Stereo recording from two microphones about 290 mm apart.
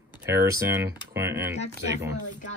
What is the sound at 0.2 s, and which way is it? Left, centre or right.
Speech, centre.